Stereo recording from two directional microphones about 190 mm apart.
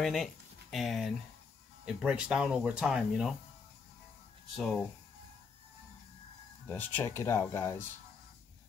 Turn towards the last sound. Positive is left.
turn(degrees=10)  # may be behind; listen again after turning